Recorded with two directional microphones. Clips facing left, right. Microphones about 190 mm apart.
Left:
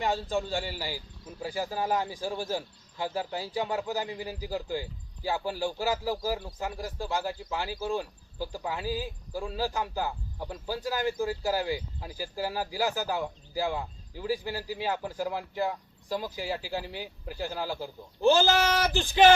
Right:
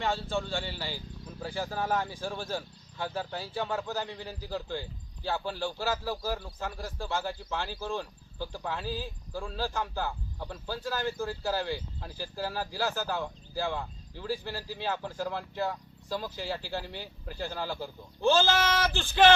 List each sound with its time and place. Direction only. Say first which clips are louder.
0.0 s speech: left 2 dB; 15° left (ahead or behind)